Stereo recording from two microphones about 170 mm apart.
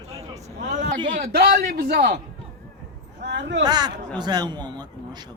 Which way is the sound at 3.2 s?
90° right.